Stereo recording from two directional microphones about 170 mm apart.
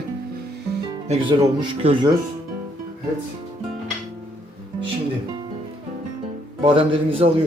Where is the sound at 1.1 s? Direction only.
30° right (ahead or behind).